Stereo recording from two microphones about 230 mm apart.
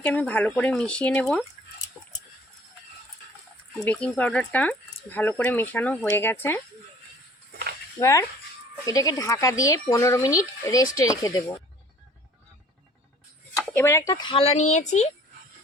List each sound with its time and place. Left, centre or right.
0.0 s speech: centre
2.0 s a sound: centre
3.8 s speech: centre
7.9 s speech: centre
13.7 s speech: centre; by 15.1 s left